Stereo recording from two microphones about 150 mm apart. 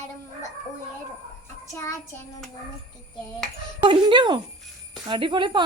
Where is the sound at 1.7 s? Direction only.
20° left (ahead or behind).